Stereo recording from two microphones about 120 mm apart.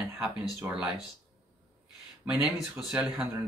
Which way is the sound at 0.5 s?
20° right (ahead or behind).